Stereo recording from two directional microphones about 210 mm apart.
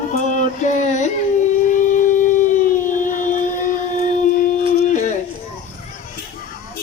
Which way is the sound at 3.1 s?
35° left (ahead or behind).